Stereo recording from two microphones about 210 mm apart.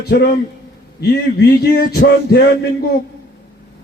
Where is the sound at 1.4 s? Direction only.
50° left (ahead or behind).